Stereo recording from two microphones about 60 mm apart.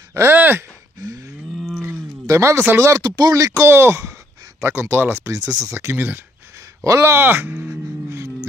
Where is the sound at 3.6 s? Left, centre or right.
Right.